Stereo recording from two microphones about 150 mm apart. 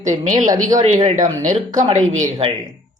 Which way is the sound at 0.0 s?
60° right (ahead or behind).